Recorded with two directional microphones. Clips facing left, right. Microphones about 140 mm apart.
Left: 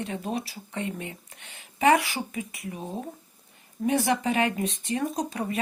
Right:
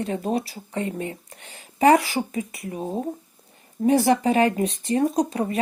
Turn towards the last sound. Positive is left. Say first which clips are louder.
# right 6 dB
turn(degrees=-35)  # may be behind; listen again after turning